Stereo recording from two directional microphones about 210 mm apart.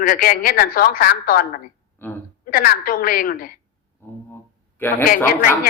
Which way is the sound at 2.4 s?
40° left (ahead or behind).